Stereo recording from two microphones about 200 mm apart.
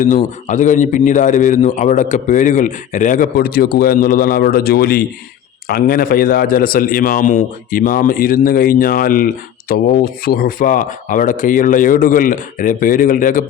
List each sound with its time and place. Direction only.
0.0 s a man's voice: 40° left (ahead or behind)